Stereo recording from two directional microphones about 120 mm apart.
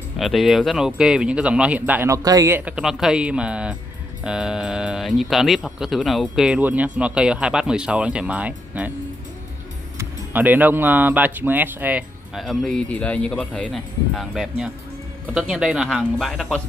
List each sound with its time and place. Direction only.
0.2 s speech: centre (ahead or behind)
2.0 s speech: 30° right (ahead or behind)
2.5 s speech: 10° right (ahead or behind)
9.9 s speech: 15° right (ahead or behind)
12.4 s speech: 5° left (ahead or behind)